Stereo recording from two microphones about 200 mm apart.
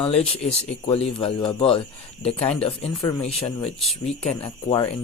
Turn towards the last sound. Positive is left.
turn(degrees=25)  # may be behind; listen again after turning